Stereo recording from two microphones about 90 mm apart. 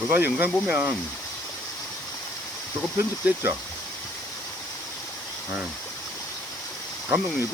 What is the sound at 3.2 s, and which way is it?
Speech, 15° right (ahead or behind).